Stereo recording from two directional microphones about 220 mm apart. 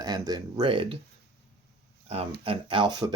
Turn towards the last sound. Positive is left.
turn(degrees=-20)  # may be behind; listen again after turning